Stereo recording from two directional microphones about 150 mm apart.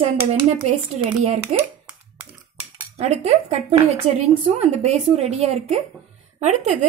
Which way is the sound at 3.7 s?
45° right (ahead or behind).